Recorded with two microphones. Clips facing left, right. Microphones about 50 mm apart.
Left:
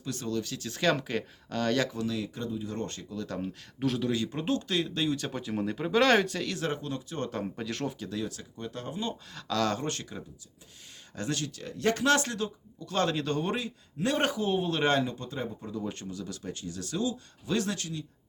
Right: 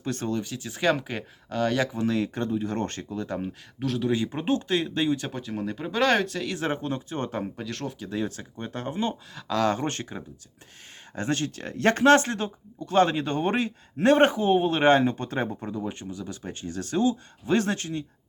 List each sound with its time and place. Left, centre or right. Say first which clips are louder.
0.0 s speech: right 4 dB; right
0.4 s speech: right 2 dB; centre
2.0 s speech: right 7 dB; right
3.2 s speech: right 4 dB; right
3.8 s speech: right 1 dB; centre
4.1 s speech: right 4 dB; right
5.3 s speech: even; centre
6.6 s speech: right 4 dB; right
7.5 s speech: even; centre
8.1 s speech: right 5 dB; right
9.5 s speech: right 4 dB; right
15.2 s speech: right 7 dB; right
15.7 s speech: right 3 dB; centre; by 18.0 s right